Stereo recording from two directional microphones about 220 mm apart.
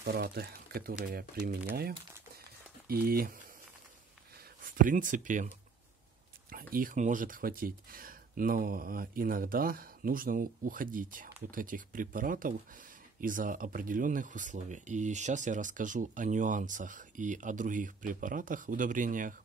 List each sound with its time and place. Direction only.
0.0 s speech: 45° right (ahead or behind)
2.9 s speech: 45° right (ahead or behind)
6.5 s speech: 40° right (ahead or behind)